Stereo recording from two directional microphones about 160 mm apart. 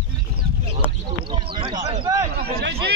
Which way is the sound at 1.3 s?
30° right (ahead or behind).